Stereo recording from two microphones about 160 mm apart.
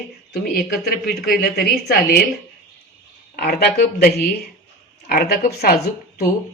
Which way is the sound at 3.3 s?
80° left.